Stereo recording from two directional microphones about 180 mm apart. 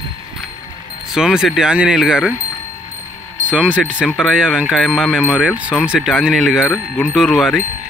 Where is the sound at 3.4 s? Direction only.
5° right (ahead or behind).